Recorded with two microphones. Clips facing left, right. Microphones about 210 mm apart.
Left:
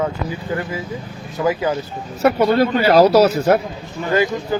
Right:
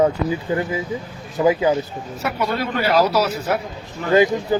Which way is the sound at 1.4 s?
15° right (ahead or behind).